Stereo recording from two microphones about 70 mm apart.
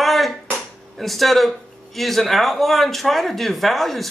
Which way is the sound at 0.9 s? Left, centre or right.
Centre.